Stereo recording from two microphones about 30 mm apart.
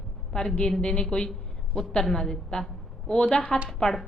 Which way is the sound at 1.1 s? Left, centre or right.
Left.